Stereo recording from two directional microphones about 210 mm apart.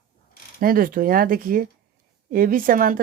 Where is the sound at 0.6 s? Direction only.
40° right (ahead or behind).